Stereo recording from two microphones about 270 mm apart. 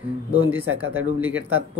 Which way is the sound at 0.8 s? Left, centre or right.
Centre.